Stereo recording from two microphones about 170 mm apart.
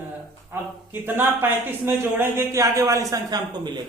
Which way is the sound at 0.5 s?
15° right (ahead or behind).